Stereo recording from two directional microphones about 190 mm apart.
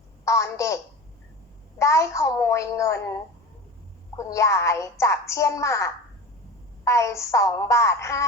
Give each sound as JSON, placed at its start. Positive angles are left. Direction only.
{"t": 0.3, "sound": "a woman's voice", "side_deg": 15}
{"t": 1.8, "sound": "a woman's voice", "side_deg": 15}
{"t": 4.2, "sound": "a woman's voice", "side_deg": 15}